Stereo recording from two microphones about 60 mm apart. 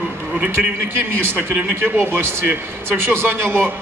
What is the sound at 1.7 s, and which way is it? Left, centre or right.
A man's voice, right.